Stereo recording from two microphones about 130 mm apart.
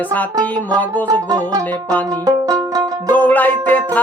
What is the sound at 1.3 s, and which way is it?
Music, 30° right (ahead or behind).